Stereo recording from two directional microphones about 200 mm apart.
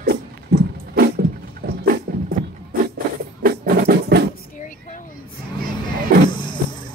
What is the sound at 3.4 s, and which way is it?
Music, 45° right (ahead or behind).